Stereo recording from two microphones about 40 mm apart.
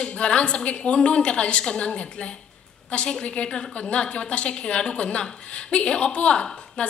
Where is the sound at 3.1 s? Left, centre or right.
Centre.